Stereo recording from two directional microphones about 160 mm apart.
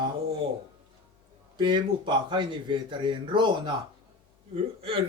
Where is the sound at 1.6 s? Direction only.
30° right (ahead or behind).